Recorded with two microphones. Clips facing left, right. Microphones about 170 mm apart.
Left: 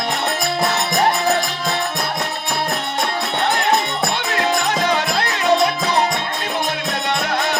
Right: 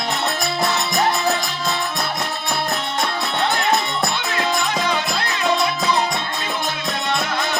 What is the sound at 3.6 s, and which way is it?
Music, 60° left (ahead or behind).